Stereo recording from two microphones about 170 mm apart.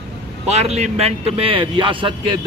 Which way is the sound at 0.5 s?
40° right (ahead or behind).